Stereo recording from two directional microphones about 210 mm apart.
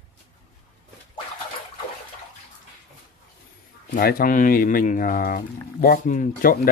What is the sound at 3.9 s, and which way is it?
Speech, 40° left (ahead or behind).